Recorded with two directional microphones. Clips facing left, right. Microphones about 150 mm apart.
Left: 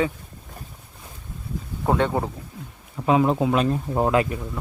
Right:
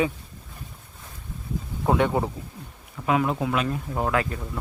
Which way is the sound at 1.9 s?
15° right (ahead or behind).